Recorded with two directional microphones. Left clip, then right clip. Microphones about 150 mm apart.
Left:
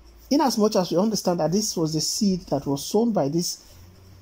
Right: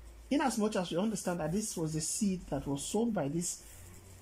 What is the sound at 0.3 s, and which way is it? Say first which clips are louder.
Speech: left 11 dB; 25° left (ahead or behind).